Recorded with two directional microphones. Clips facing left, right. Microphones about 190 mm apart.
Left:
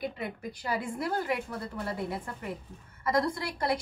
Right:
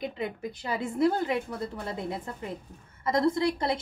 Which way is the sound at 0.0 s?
20° right (ahead or behind).